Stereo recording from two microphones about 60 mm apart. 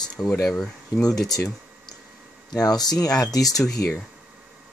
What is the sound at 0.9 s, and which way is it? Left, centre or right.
Speech, left.